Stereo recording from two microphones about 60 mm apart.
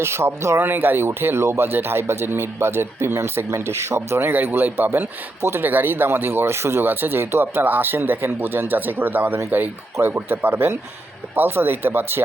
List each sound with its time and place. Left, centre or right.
0.0 s speech: right
4.3 s a man's voice: right